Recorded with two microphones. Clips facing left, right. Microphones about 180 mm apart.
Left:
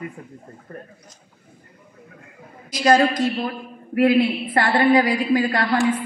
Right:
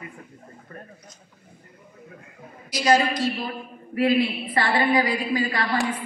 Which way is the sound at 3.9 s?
55° left (ahead or behind).